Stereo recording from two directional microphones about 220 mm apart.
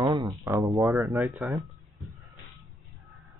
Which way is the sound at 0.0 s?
15° right (ahead or behind).